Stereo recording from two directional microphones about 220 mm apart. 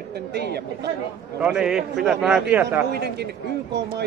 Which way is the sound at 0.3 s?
50° right (ahead or behind).